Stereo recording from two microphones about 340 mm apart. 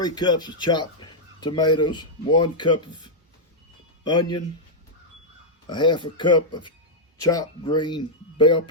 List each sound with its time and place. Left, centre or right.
0.0 s speech: centre
5.6 s speech: centre